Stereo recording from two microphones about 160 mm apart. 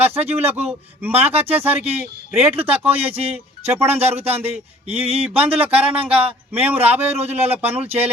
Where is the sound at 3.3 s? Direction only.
15° right (ahead or behind).